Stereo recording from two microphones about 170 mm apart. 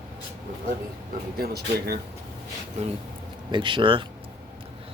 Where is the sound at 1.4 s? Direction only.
70° right (ahead or behind).